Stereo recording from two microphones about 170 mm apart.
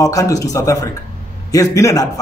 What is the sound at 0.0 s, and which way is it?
A man's voice, 20° left (ahead or behind).